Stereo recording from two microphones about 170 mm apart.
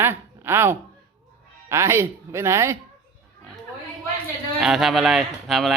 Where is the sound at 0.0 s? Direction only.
15° right (ahead or behind).